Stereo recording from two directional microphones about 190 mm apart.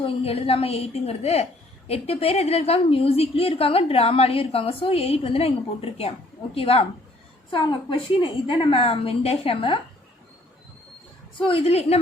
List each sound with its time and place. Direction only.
0.0 s a woman's voice: 30° left (ahead or behind)
11.3 s a woman's voice: 30° left (ahead or behind)